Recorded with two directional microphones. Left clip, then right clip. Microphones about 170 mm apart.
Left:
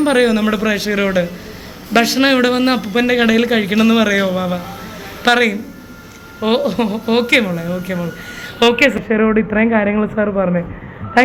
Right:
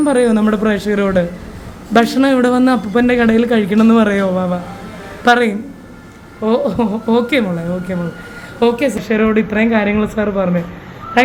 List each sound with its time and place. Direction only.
0.0 s a man's voice: 15° right (ahead or behind)
9.0 s a man's voice: 25° right (ahead or behind)